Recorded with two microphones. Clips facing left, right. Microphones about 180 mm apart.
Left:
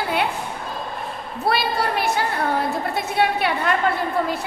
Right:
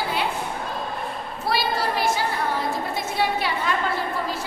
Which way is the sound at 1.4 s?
60° left (ahead or behind).